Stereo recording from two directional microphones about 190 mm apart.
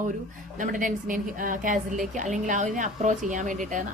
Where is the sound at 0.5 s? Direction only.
45° right (ahead or behind).